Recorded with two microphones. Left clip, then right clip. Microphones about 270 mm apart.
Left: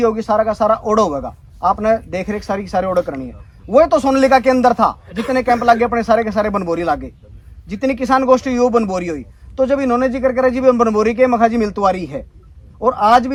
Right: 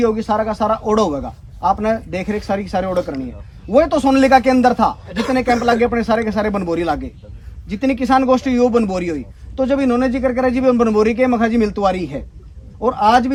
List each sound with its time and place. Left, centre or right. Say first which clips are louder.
0.0 s speech: left 2 dB; centre
5.0 s speech: right 2 dB; right
5.3 s speech: left 3 dB; centre